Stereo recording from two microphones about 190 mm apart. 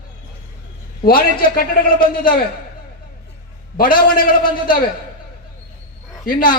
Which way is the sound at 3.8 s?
50° left (ahead or behind).